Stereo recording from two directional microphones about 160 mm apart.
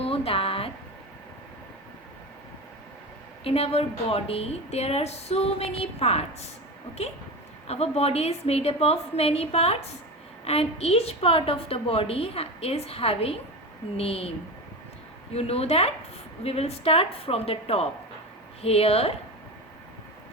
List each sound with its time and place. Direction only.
0.0 s a sound: 35° left (ahead or behind)
3.4 s a woman's voice: 40° left (ahead or behind)
7.7 s a woman's voice: 40° left (ahead or behind)
15.4 s a woman's voice: 40° left (ahead or behind)